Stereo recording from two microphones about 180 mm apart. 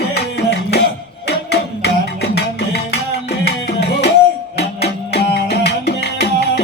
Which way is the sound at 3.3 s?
65° left (ahead or behind).